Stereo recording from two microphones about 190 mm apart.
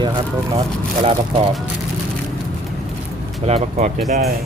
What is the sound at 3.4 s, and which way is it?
Speech, 35° right (ahead or behind).